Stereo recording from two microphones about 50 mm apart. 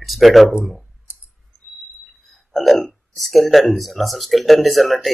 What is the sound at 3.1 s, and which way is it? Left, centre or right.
Speech, centre.